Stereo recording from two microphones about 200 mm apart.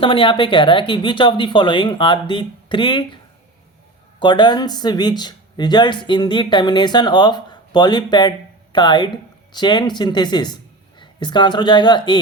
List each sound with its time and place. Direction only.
0.0 s speech: 25° left (ahead or behind)
4.2 s speech: 25° left (ahead or behind)